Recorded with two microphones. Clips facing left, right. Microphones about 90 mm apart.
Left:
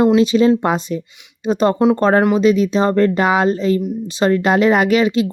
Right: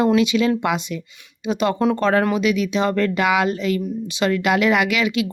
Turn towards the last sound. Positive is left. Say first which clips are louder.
# left 5 dB
turn(degrees=35)  # may be behind; listen again after turning